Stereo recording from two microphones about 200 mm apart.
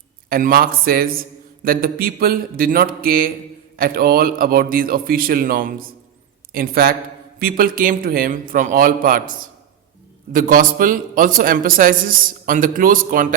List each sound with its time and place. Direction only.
0.3 s a man's voice: 45° right (ahead or behind)
10.3 s a man's voice: 45° right (ahead or behind)